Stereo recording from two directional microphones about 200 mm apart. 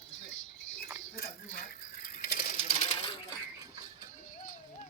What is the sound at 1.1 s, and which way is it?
Sewing machine, 45° left (ahead or behind).